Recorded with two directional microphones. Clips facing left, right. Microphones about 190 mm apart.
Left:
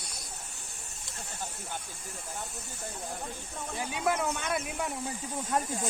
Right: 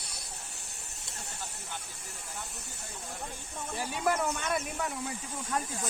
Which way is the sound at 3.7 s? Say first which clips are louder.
Even; centre (ahead or behind).